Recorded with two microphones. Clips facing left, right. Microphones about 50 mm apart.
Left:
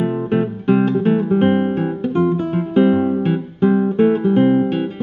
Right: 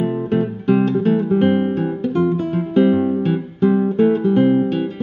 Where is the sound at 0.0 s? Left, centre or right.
Left.